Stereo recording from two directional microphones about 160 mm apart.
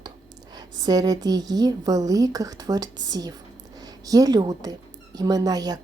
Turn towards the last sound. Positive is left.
turn(degrees=-25)  # may be behind; listen again after turning